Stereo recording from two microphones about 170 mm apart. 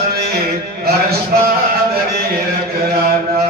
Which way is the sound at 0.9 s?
65° right (ahead or behind).